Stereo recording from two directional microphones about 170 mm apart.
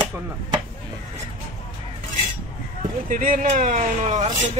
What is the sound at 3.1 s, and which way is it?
Speech, 50° right (ahead or behind).